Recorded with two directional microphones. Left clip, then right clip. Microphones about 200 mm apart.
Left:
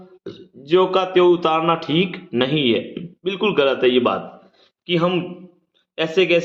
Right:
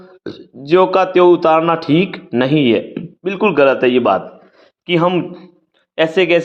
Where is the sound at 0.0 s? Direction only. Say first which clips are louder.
Right 6 dB; 35° right (ahead or behind).